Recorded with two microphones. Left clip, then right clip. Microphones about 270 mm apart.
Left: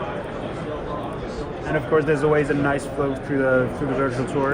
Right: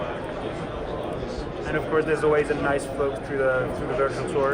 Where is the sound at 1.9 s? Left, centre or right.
Left.